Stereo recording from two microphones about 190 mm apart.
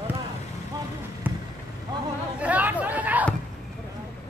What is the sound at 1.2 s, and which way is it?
Basketball bounce, 10° right (ahead or behind).